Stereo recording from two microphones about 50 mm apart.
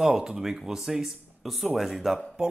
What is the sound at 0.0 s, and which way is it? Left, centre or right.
Speech, centre.